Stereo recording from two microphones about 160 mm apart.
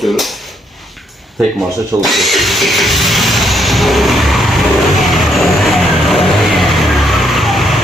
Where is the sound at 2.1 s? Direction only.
Centre (ahead or behind).